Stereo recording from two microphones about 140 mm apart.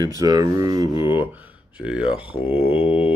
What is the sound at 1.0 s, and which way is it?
Speech, 15° right (ahead or behind).